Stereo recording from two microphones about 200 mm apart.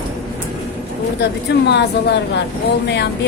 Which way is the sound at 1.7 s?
60° left (ahead or behind).